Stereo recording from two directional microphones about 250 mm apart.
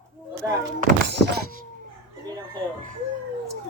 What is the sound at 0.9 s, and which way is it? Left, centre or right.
Thunk, right.